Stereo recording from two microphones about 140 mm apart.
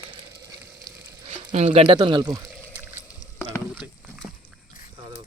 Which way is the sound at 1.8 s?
35° right (ahead or behind).